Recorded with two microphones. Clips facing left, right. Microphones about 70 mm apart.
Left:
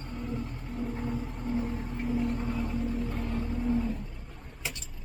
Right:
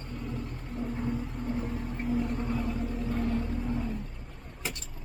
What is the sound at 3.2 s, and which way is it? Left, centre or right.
Boat, centre.